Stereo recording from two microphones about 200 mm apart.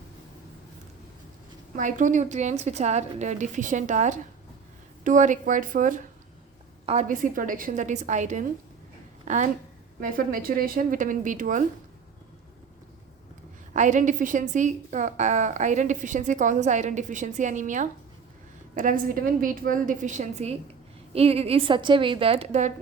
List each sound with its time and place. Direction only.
1.7 s a woman's voice: 40° right (ahead or behind)
13.7 s a woman's voice: 40° right (ahead or behind)